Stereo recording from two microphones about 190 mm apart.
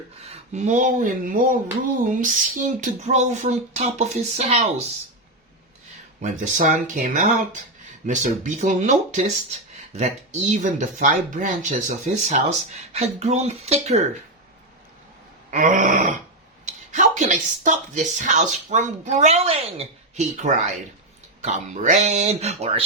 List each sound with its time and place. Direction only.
0.3 s speech: 35° right (ahead or behind)
6.2 s speech: 40° right (ahead or behind)
15.4 s speech: 40° right (ahead or behind)